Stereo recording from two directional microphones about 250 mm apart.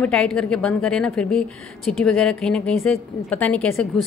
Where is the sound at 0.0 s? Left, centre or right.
Centre.